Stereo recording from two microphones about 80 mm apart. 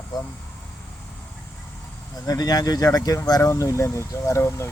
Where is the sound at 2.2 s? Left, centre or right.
Left.